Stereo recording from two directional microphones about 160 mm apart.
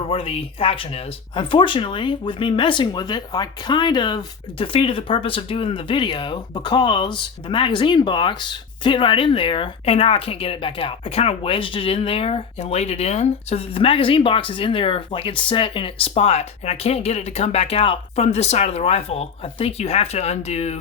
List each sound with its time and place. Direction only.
0.1 s speech: 35° left (ahead or behind)